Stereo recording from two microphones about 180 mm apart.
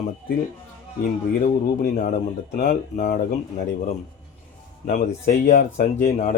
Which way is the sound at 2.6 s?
45° left (ahead or behind).